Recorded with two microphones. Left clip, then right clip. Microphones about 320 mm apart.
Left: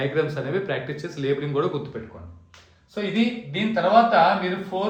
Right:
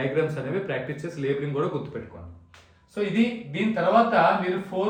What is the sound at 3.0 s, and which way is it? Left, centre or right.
Speech, centre.